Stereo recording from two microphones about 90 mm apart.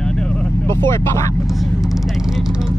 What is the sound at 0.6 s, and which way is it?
Speech, 30° left (ahead or behind).